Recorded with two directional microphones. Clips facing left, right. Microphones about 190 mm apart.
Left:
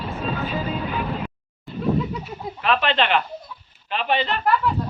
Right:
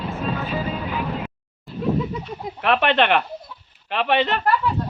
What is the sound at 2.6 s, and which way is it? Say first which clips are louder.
Speech: right 3 dB; 60° right (ahead or behind).